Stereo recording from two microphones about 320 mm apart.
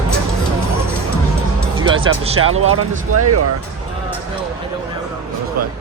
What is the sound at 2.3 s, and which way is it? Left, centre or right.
Speech, right.